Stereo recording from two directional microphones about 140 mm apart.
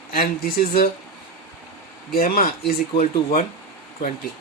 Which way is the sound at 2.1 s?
90° left.